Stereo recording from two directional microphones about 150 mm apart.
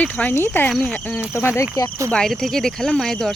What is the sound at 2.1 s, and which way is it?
Speech, 5° left (ahead or behind).